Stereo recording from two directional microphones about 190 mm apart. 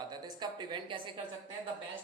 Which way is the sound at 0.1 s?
25° right (ahead or behind).